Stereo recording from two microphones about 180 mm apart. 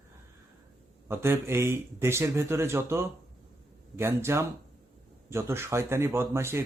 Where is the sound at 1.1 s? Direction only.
15° right (ahead or behind).